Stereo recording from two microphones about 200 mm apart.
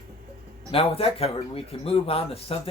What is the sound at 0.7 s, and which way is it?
Speech, 30° left (ahead or behind).